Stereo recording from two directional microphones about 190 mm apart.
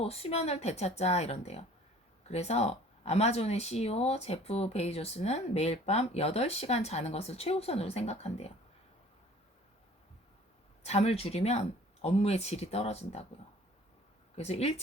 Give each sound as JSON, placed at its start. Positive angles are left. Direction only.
{"t": 0.0, "sound": "speech", "side_deg": 30}
{"t": 10.8, "sound": "speech", "side_deg": 35}
{"t": 14.3, "sound": "speech", "side_deg": 35}